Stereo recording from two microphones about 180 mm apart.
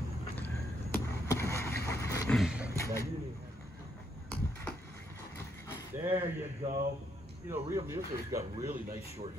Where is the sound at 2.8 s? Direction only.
15° left (ahead or behind).